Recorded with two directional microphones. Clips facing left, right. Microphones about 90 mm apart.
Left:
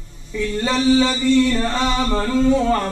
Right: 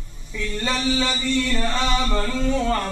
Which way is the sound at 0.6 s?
20° left (ahead or behind).